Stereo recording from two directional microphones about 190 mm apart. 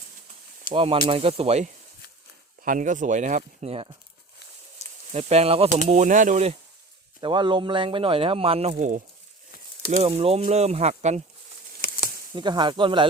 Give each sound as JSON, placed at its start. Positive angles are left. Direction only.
{"t": 0.7, "sound": "speech", "side_deg": -30}
{"t": 4.8, "sound": "sizzle", "side_deg": 35}
{"t": 5.1, "sound": "speech", "side_deg": -30}
{"t": 7.2, "sound": "speech", "side_deg": -25}
{"t": 10.0, "sound": "speech", "side_deg": -30}
{"t": 12.3, "sound": "speech", "side_deg": -25}